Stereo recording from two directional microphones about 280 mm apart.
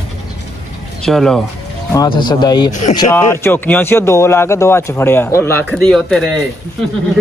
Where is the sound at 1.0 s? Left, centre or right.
Centre.